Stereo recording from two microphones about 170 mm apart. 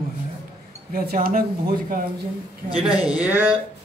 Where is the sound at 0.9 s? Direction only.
60° right (ahead or behind).